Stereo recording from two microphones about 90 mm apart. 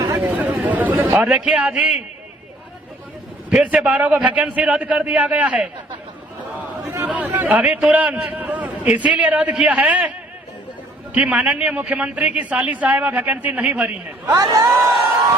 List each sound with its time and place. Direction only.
0.2 s a sound: 20° right (ahead or behind)
3.5 s a man's voice: 15° right (ahead or behind)
6.8 s a man's voice: 25° right (ahead or behind)
14.3 s speech: 40° right (ahead or behind)